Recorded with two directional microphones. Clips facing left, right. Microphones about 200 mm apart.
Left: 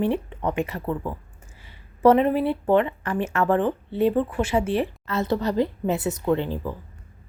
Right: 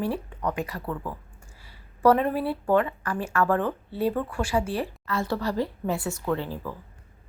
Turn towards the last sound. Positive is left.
turn(degrees=20)  # may be behind; listen again after turning